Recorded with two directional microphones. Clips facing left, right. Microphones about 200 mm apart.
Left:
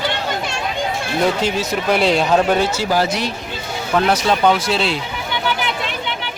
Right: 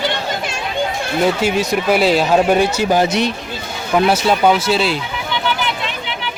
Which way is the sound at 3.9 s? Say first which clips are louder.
Right 2 dB; 10° right (ahead or behind).